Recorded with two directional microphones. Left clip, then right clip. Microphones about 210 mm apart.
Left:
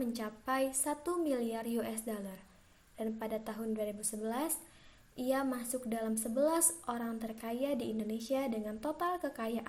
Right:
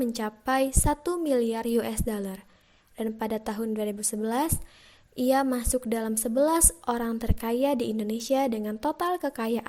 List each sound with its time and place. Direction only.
0.0 s a woman's voice: 45° right (ahead or behind)